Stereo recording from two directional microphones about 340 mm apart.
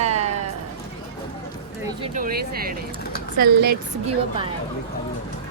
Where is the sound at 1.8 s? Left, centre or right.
Centre.